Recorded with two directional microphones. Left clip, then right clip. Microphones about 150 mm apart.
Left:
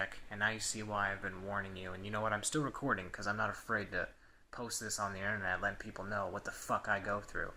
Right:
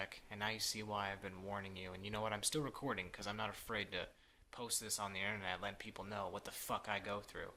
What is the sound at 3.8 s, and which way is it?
Speech, centre (ahead or behind).